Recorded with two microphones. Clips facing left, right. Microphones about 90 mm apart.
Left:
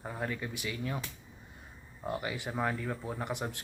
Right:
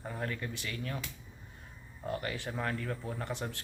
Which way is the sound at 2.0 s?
15° left (ahead or behind).